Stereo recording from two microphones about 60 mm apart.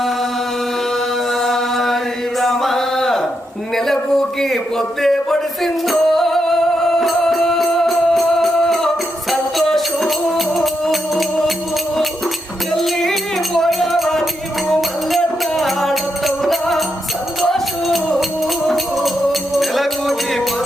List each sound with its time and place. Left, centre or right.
1.4 s chant: centre
2.4 s a sound: centre
5.0 s music: centre
12.7 s music: centre